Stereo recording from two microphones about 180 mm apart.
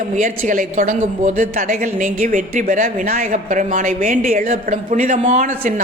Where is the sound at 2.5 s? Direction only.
40° right (ahead or behind).